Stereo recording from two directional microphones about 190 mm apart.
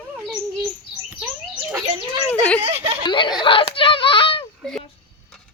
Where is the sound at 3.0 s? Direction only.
25° left (ahead or behind).